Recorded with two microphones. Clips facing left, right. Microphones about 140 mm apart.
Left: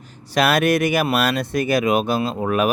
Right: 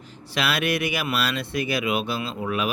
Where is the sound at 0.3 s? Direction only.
45° left (ahead or behind).